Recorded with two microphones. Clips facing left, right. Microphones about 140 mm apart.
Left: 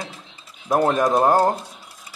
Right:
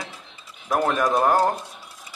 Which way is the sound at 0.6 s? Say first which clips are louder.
Left 3 dB; 15° left (ahead or behind).